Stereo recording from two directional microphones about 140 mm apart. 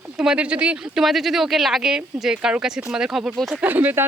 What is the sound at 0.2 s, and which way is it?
Speech, 5° right (ahead or behind).